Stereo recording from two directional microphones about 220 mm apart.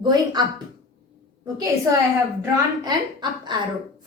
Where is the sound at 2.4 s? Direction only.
20° right (ahead or behind).